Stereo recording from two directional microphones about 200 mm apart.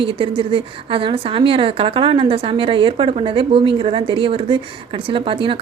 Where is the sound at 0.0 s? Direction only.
25° right (ahead or behind).